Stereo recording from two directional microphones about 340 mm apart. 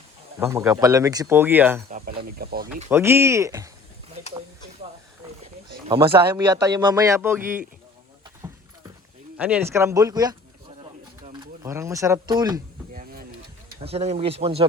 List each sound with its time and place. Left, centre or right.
0.3 s speech: centre
1.9 s speech: right
2.9 s speech: centre
5.9 s speech: centre
9.4 s speech: centre
11.3 s speech: centre
12.9 s vehicle: right
13.8 s speech: centre